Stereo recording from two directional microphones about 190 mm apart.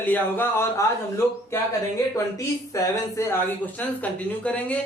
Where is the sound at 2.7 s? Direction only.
15° left (ahead or behind).